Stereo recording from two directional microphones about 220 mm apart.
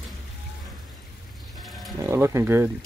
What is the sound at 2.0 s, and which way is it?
Speech, 10° right (ahead or behind).